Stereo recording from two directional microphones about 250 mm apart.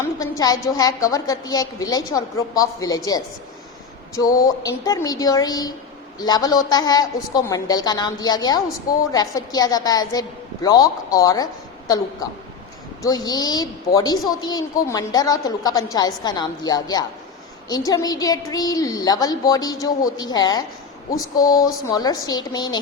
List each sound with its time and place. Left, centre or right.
0.2 s a woman's voice: centre
13.0 s a woman's voice: centre